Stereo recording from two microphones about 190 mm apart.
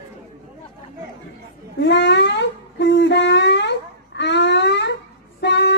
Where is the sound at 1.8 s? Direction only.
70° left (ahead or behind).